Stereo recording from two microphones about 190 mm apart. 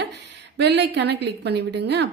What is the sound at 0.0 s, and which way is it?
A woman's voice, 65° right (ahead or behind).